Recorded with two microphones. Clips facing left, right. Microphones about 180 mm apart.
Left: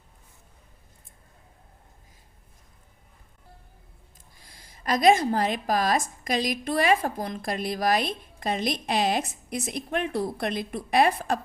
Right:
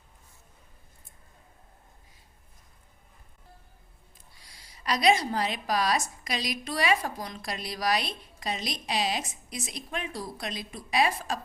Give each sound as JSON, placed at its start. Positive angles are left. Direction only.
{"t": 4.4, "sound": "a woman's voice", "side_deg": 50}